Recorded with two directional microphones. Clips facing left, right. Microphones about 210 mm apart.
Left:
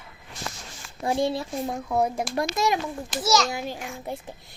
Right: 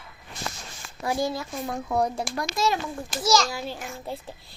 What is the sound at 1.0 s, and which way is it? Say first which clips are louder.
Speech: left 2 dB; 25° left (ahead or behind).